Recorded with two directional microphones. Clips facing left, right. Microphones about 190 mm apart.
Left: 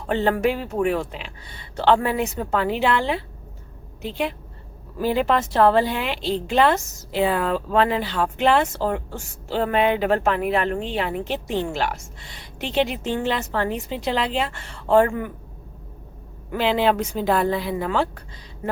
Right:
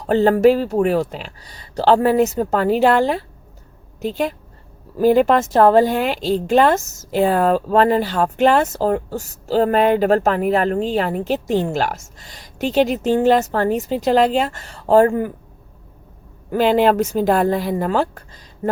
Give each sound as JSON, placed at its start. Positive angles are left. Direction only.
{"t": 0.1, "sound": "a woman's voice", "side_deg": -40}
{"t": 16.5, "sound": "a woman's voice", "side_deg": -45}